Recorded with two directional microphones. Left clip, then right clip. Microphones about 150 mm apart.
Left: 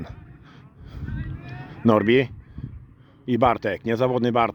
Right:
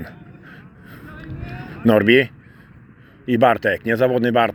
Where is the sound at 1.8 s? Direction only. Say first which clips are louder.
Right 4 dB; 45° left (ahead or behind).